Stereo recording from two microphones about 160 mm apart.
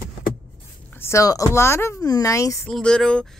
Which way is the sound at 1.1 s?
20° left (ahead or behind).